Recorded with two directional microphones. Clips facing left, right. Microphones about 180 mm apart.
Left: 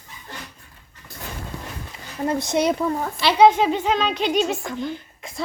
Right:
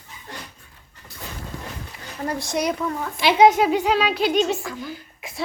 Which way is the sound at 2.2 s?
20° left (ahead or behind).